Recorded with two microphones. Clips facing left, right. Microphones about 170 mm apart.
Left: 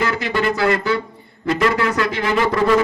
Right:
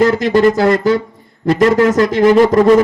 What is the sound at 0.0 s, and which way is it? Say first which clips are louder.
A man's voice: right 10 dB; 40° right (ahead or behind).